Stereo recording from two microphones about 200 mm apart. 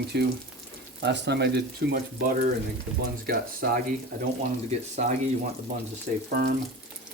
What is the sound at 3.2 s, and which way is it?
Speech, 50° right (ahead or behind).